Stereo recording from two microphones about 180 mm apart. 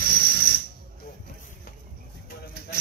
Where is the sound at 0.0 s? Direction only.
55° right (ahead or behind).